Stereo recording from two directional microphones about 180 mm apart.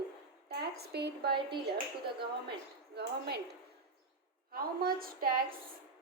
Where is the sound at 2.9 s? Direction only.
65° right (ahead or behind).